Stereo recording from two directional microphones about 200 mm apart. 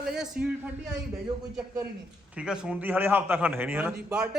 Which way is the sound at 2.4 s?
5° right (ahead or behind).